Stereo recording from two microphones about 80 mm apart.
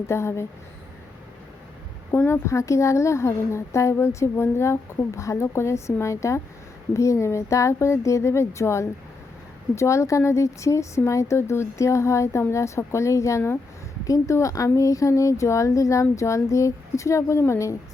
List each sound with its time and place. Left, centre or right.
0.1 s speech: left
2.1 s speech: left